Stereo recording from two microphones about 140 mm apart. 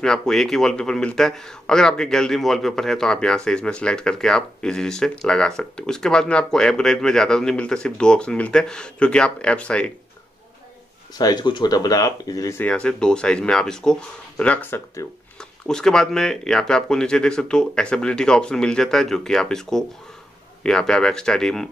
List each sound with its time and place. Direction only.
0.0 s a man's voice: 5° left (ahead or behind)
11.1 s speech: 30° left (ahead or behind)
12.6 s a man's voice: 5° left (ahead or behind)
15.6 s a man's voice: 5° left (ahead or behind)